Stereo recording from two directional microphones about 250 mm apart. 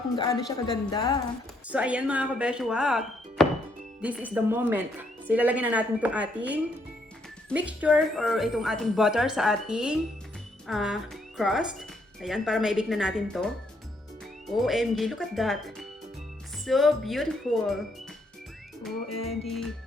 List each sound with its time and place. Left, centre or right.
0.2 s a woman's voice: centre
1.7 s speech: centre